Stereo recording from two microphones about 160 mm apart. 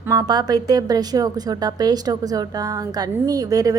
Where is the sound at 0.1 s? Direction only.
25° right (ahead or behind).